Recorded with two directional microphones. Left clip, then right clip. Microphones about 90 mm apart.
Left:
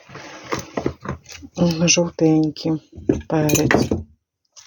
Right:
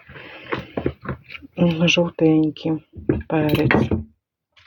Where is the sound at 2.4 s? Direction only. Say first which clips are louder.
Even; 25° left (ahead or behind).